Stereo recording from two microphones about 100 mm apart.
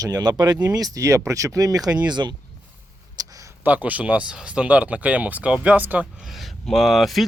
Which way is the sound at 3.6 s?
15° right (ahead or behind).